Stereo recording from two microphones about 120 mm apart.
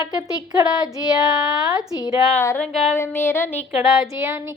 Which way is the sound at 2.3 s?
20° left (ahead or behind).